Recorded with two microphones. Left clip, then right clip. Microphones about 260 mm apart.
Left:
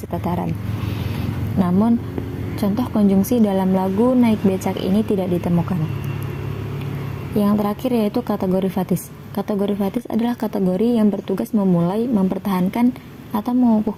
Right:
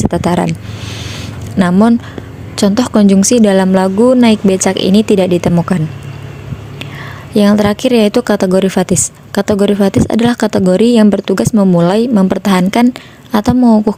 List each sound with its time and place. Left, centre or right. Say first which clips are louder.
0.1 s a woman's voice: right 11 dB; right
1.5 s a woman's voice: right 9 dB; right
7.3 s a woman's voice: right 10 dB; right